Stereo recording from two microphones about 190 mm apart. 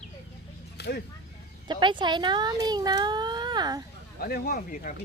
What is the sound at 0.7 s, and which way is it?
Vehicle, 60° left (ahead or behind).